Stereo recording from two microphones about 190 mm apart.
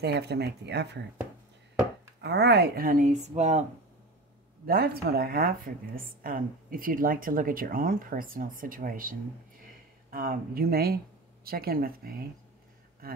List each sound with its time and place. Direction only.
0.0 s speech: 60° right (ahead or behind)
2.2 s a woman's voice: 60° right (ahead or behind); by 3.6 s 35° right (ahead or behind)
4.6 s a woman's voice: 55° right (ahead or behind)
10.1 s a woman's voice: 50° right (ahead or behind)